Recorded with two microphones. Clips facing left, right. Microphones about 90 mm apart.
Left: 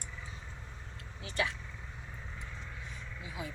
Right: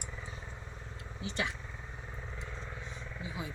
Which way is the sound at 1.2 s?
25° right (ahead or behind).